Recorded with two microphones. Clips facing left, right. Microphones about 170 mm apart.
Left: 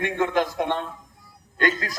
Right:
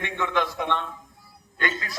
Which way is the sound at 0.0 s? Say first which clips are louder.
Left 4 dB; 45° left (ahead or behind).